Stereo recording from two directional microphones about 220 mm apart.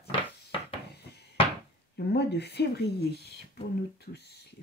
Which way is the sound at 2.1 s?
50° left (ahead or behind).